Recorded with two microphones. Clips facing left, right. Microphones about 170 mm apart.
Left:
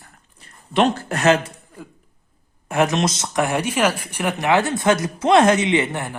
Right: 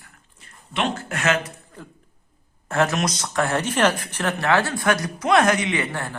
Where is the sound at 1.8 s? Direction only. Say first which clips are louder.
Left 2 dB; 10° left (ahead or behind).